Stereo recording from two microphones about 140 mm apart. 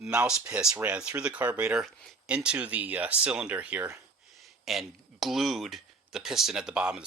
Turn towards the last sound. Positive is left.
turn(degrees=-5)  # may be behind; listen again after turning